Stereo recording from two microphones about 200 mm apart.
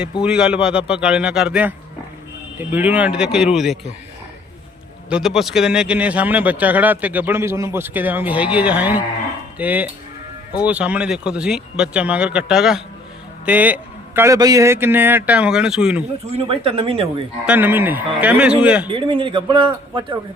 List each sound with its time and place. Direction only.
0.0 s speech: 5° right (ahead or behind)
5.0 s speech: 5° right (ahead or behind)
16.3 s speech: 30° right (ahead or behind)
17.4 s speech: 10° right (ahead or behind)
18.9 s speech: 25° right (ahead or behind)